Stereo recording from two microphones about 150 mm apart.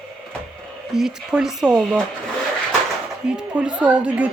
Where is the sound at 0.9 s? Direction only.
5° right (ahead or behind).